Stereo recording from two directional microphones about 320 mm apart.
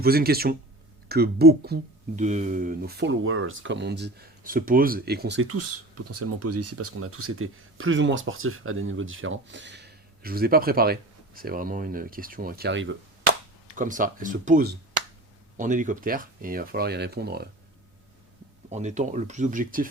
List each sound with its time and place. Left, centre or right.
0.0 s speech: right
18.7 s speech: right